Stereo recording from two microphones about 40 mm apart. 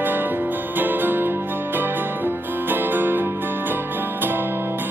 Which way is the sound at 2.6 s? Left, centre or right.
Right.